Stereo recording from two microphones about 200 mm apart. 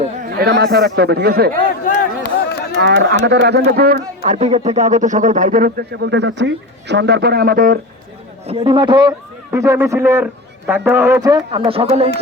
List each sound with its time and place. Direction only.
0.3 s a man's voice: 50° right (ahead or behind)
2.2 s a sound: 50° left (ahead or behind)
2.8 s a man's voice: 60° right (ahead or behind)
4.3 s speech: 35° right (ahead or behind)
6.0 s speech: 60° right (ahead or behind); by 7.8 s 45° right (ahead or behind)
8.4 s a man's voice: 25° right (ahead or behind)